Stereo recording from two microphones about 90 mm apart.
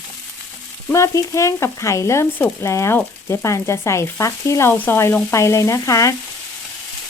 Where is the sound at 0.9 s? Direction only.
35° left (ahead or behind).